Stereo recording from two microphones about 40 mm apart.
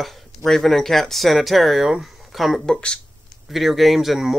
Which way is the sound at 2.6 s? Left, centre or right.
Centre.